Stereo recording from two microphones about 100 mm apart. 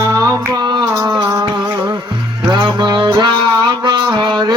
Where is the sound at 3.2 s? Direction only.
50° right (ahead or behind).